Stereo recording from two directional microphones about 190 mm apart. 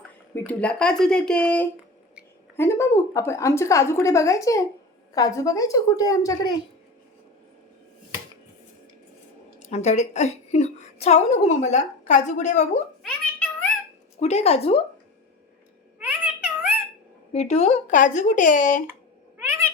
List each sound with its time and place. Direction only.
0.3 s a woman's voice: 5° left (ahead or behind)
9.6 s a woman's voice: 35° left (ahead or behind)
14.2 s a woman's voice: 35° left (ahead or behind)
16.0 s a sound: 5° right (ahead or behind)
17.3 s a woman's voice: 35° left (ahead or behind)
19.4 s cat: 10° right (ahead or behind)